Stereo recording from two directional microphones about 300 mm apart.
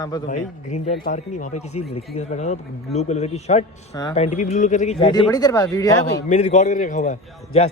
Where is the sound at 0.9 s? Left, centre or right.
Left; by 5.9 s centre.